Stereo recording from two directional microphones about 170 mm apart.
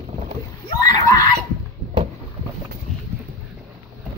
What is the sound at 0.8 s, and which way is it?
Screaming, 20° left (ahead or behind).